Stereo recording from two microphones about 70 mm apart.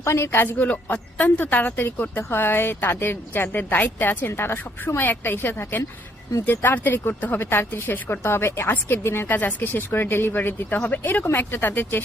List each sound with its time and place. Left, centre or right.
0.0 s a woman's voice: left